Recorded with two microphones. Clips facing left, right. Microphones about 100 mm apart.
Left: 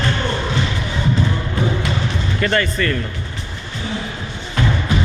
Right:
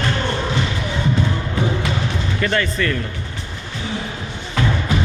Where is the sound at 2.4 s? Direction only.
Centre (ahead or behind).